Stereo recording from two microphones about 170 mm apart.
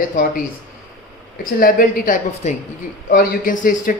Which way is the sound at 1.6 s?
60° left (ahead or behind).